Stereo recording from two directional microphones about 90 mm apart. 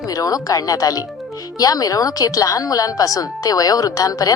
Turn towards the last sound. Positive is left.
turn(degrees=40)  # may be behind; listen again after turning